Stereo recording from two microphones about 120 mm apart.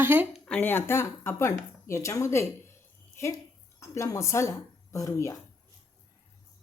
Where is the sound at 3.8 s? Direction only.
25° left (ahead or behind).